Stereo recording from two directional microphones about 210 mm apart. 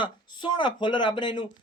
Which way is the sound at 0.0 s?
20° left (ahead or behind).